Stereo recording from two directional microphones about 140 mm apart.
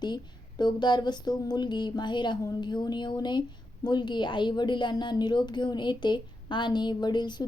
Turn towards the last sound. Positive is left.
turn(degrees=30)  # may be behind; listen again after turning